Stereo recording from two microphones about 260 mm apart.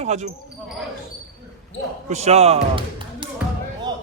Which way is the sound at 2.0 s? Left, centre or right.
Right.